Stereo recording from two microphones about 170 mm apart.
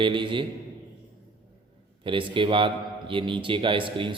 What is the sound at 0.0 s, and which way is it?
Speech, 30° right (ahead or behind).